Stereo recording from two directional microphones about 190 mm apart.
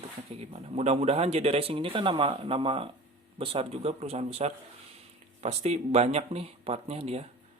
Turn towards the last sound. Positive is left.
turn(degrees=-35)  # may be behind; listen again after turning